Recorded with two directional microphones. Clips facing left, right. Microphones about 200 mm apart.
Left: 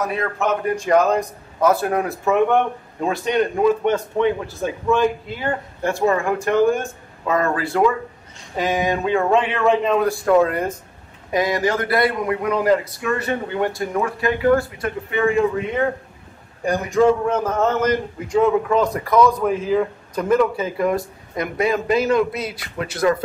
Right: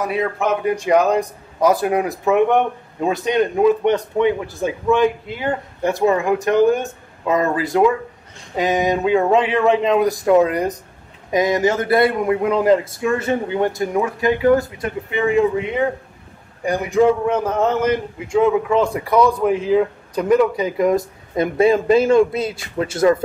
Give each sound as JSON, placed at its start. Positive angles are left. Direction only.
{"t": 0.0, "sound": "a man's voice", "side_deg": -10}